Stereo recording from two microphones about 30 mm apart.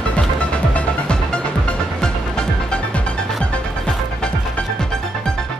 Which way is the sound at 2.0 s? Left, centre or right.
Left.